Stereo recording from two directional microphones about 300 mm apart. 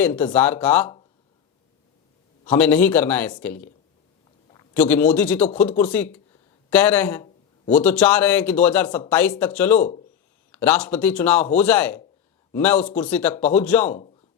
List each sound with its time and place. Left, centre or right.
0.0 s speech: centre
2.5 s speech: centre
4.5 s a sound: centre
5.1 s speech: centre
9.7 s speech: left
10.5 s speech: centre